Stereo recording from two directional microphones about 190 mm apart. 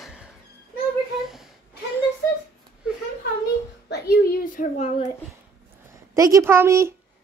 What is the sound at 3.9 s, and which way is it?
Speech, 55° left (ahead or behind).